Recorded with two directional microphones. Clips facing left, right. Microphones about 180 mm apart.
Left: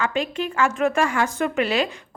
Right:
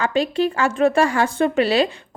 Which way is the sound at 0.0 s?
35° right (ahead or behind).